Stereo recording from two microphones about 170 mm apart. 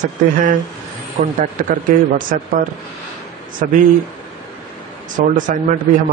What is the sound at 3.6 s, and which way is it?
Speech, 55° right (ahead or behind).